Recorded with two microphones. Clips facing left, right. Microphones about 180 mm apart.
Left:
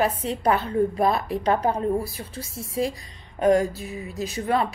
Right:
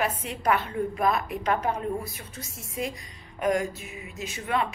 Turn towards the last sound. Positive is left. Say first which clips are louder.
# left 5 dB
turn(degrees=35)  # may be behind; listen again after turning